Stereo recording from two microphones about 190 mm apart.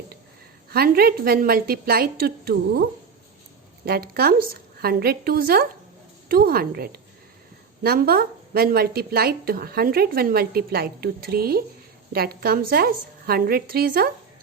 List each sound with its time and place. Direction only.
0.7 s a woman's voice: 50° right (ahead or behind)
3.8 s a woman's voice: 55° right (ahead or behind)